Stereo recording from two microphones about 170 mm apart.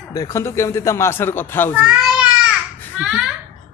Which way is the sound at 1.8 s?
5° right (ahead or behind).